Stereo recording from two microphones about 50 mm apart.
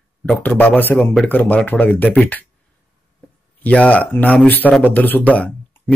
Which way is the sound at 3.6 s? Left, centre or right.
Left.